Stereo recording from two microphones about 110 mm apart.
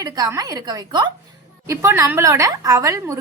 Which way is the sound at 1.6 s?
25° right (ahead or behind).